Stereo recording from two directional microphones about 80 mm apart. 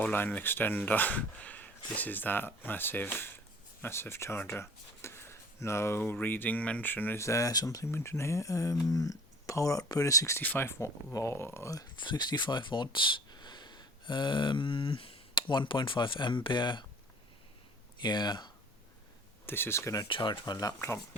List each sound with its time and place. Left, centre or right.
0.0 s speech: left
7.2 s speech: left
7.9 s speech: left
10.4 s speech: left
11.9 s speech: left
18.0 s speech: left
19.5 s speech: left
20.1 s speech: left
20.5 s speech: left